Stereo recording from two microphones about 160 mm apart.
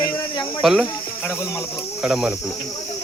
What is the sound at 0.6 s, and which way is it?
Speech, centre (ahead or behind).